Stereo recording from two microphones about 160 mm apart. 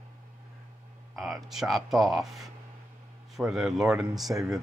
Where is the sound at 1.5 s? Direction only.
Centre (ahead or behind).